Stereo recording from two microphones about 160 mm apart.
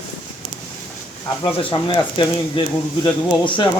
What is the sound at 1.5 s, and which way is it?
Speech, 35° left (ahead or behind).